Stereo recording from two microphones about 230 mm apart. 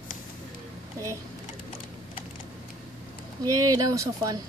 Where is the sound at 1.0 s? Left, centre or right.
Centre.